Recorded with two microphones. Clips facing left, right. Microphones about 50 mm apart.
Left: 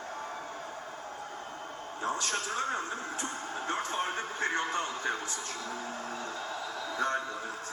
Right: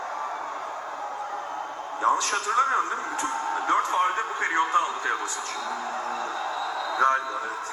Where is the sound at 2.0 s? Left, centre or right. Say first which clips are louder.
Right 9 dB; right.